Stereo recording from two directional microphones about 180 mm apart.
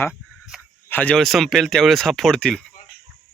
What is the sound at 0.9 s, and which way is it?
Speech, 10° left (ahead or behind).